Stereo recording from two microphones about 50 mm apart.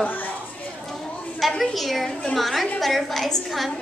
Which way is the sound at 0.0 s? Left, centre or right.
Left.